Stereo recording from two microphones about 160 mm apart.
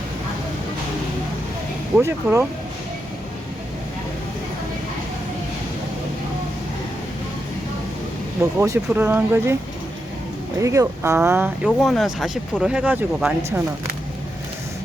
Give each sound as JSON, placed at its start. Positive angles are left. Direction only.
{"t": 2.2, "sound": "speech", "side_deg": -5}
{"t": 8.4, "sound": "speech", "side_deg": -20}
{"t": 10.6, "sound": "speech", "side_deg": -20}